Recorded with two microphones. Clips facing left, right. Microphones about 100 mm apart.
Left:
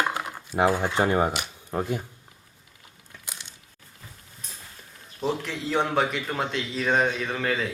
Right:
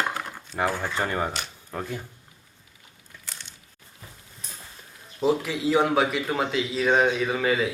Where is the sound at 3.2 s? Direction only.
15° left (ahead or behind).